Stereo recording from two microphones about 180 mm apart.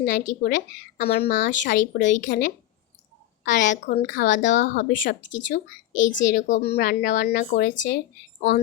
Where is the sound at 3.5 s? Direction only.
45° left (ahead or behind).